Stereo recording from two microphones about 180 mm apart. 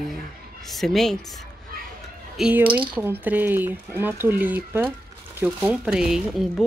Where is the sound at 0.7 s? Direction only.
Centre (ahead or behind).